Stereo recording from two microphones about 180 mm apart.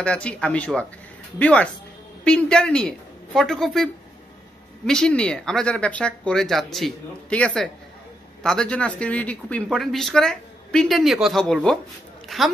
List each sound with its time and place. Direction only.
0.0 s speech: 5° left (ahead or behind)